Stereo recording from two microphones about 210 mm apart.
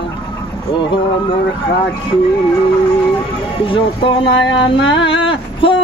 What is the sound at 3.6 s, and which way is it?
Speech, 25° left (ahead or behind).